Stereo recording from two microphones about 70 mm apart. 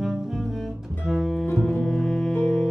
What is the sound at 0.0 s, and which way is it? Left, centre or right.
Double bass, centre.